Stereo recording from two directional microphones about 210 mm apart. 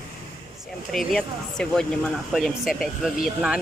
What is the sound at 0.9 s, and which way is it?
Speech, centre (ahead or behind).